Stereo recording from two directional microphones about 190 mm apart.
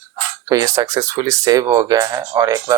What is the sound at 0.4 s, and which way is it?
Speech, 20° right (ahead or behind).